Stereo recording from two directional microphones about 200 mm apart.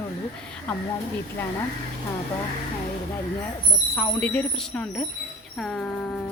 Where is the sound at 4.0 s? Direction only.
5° left (ahead or behind).